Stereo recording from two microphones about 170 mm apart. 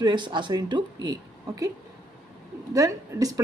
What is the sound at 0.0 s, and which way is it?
Speech, 25° right (ahead or behind).